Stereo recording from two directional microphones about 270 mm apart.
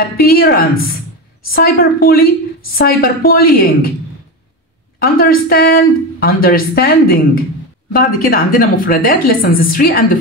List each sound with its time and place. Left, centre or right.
0.2 s speech: left
4.9 s speech: left